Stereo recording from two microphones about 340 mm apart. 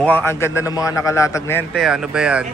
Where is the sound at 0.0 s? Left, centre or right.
Centre.